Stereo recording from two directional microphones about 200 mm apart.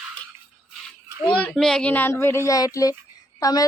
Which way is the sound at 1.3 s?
5° left (ahead or behind).